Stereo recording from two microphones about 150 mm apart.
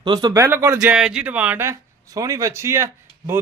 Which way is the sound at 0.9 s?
5° right (ahead or behind).